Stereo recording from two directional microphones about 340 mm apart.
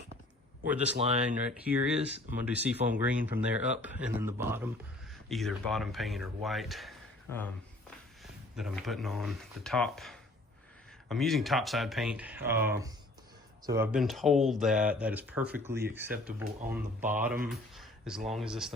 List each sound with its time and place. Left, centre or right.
0.9 s speech: centre
1.5 s a man's voice: centre
8.2 s a man's voice: centre